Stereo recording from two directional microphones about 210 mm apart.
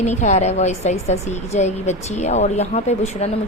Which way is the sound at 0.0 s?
35° left (ahead or behind).